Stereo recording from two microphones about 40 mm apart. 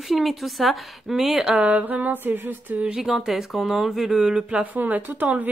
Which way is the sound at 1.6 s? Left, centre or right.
Right.